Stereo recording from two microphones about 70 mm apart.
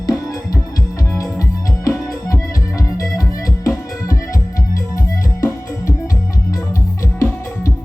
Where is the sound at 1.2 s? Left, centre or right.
Left.